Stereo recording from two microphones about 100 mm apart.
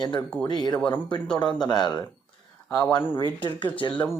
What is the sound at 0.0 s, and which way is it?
Speech, 50° left (ahead or behind).